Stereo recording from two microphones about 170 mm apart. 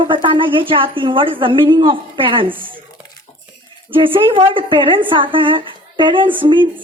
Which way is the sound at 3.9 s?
30° right (ahead or behind).